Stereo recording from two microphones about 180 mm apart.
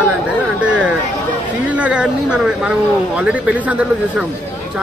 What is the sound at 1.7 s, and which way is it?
A woman's voice, 5° right (ahead or behind).